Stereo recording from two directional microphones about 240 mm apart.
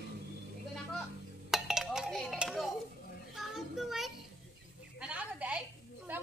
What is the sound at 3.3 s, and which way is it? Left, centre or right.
Child singing, centre.